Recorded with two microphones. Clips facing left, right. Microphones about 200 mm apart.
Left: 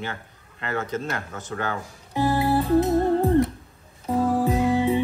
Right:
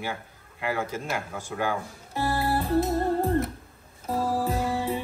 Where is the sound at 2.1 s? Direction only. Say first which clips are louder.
Left 5 dB; 15° left (ahead or behind).